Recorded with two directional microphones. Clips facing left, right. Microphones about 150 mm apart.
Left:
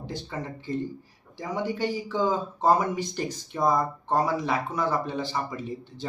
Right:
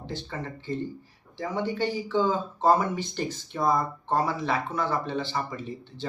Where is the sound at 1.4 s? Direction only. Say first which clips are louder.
Even; 10° left (ahead or behind).